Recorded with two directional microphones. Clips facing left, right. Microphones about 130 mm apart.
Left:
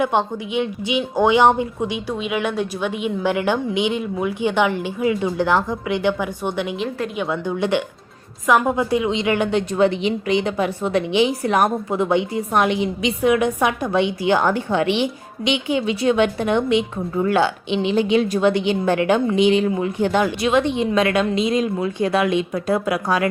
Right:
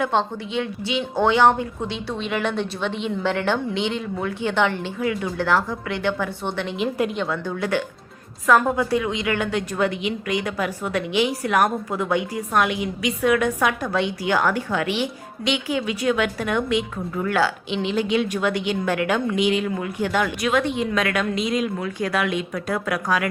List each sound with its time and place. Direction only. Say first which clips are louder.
0.0 s speech: left 2 dB; 15° left (ahead or behind)
6.7 s a woman's voice: right 2 dB; 5° right (ahead or behind)
7.3 s a woman's voice: left 4 dB; 20° left (ahead or behind)